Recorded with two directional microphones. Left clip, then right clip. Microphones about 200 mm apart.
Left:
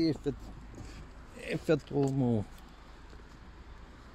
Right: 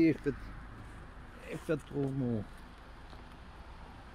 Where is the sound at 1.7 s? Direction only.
30° left (ahead or behind).